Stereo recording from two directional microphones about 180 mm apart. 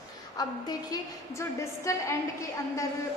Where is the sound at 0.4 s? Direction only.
20° left (ahead or behind).